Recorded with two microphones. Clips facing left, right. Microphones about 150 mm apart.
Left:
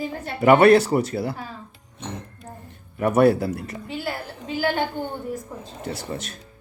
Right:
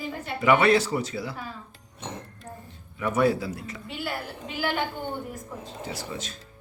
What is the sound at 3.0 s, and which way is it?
Speech, 55° left (ahead or behind).